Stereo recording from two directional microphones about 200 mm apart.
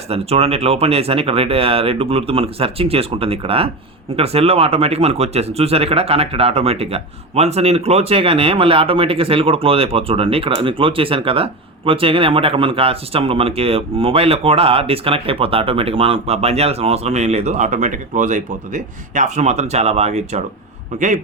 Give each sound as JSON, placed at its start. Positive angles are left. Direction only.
{"t": 0.1, "sound": "a man's voice", "side_deg": -30}